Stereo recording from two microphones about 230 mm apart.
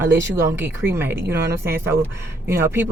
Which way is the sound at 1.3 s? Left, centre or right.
Right.